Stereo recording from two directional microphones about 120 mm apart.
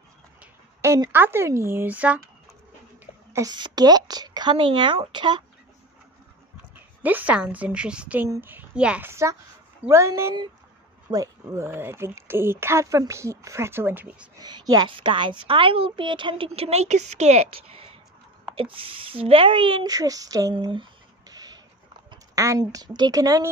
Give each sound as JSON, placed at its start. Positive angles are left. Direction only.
{"t": 0.7, "sound": "a sound", "side_deg": -25}
{"t": 1.1, "sound": "speech", "side_deg": -20}
{"t": 3.3, "sound": "speech", "side_deg": -35}
{"t": 7.0, "sound": "a woman's voice", "side_deg": -15}
{"t": 9.1, "sound": "speech", "side_deg": -25}
{"t": 14.4, "sound": "a woman's voice", "side_deg": -35}
{"t": 16.5, "sound": "a woman's voice", "side_deg": -60}
{"t": 19.9, "sound": "speech", "side_deg": -30}
{"t": 20.7, "sound": "a sound", "side_deg": -35}
{"t": 22.3, "sound": "speech", "side_deg": -25}